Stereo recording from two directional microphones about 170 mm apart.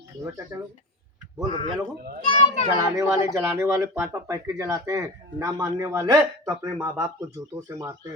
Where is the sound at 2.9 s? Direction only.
20° right (ahead or behind).